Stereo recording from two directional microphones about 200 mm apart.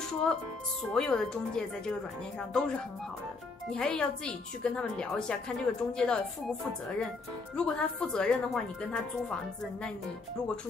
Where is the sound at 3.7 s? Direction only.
5° left (ahead or behind).